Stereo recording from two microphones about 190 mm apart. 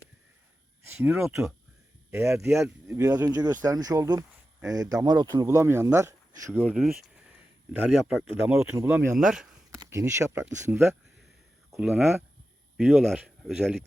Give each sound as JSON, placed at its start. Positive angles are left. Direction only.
{"t": 0.9, "sound": "speech", "side_deg": -10}
{"t": 6.7, "sound": "speech", "side_deg": 0}
{"t": 9.1, "sound": "speech", "side_deg": 0}
{"t": 9.7, "sound": "speech", "side_deg": -15}